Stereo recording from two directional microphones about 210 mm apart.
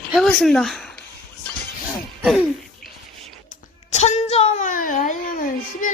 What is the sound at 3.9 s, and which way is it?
Speech, 30° left (ahead or behind).